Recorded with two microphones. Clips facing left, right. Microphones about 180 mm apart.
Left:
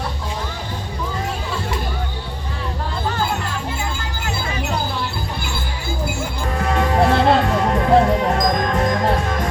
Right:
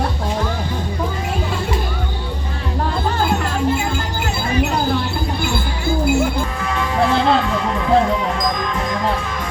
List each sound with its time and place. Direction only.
6.6 s music: 45° left (ahead or behind)